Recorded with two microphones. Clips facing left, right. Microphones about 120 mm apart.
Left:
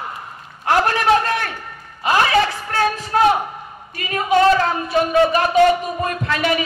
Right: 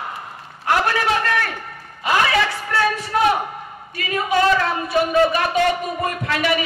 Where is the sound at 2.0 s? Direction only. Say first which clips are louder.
Left 2 dB; 35° left (ahead or behind).